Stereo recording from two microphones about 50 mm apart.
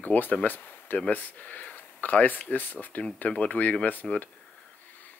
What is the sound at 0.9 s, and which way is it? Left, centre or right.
Speech, left.